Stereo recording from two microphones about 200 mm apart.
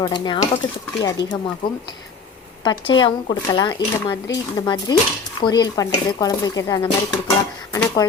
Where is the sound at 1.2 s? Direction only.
60° left (ahead or behind).